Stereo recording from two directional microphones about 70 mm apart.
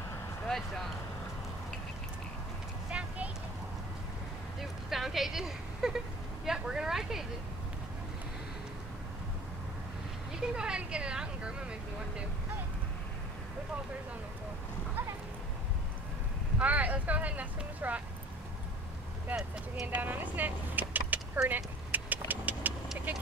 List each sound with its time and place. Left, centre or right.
0.5 s speech: centre
2.9 s clip-clop: centre
4.6 s vehicle: centre
6.4 s a sound: centre
10.4 s speech: centre
16.5 s speech: right
19.3 s speech: right
21.5 s vehicle: right
23.1 s speech: right